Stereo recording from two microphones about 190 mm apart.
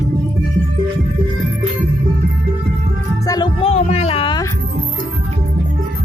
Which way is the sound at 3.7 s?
35° left (ahead or behind).